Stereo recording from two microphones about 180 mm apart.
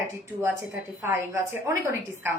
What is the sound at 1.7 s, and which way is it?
Speech, 15° right (ahead or behind).